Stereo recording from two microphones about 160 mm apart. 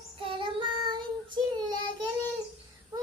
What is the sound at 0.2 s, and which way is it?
Child singing, 35° right (ahead or behind).